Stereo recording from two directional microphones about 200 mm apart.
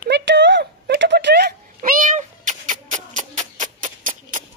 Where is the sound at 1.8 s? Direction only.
40° right (ahead or behind).